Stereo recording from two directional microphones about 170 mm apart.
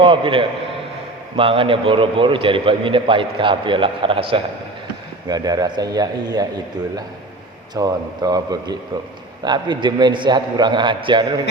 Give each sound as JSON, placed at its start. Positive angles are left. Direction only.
{"t": 0.0, "sound": "a man's voice", "side_deg": -30}
{"t": 7.7, "sound": "a man's voice", "side_deg": -20}